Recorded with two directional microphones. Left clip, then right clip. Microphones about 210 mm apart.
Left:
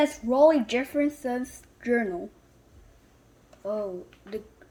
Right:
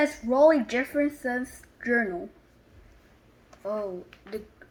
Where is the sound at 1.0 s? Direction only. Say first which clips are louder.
Right 1 dB; 25° left (ahead or behind).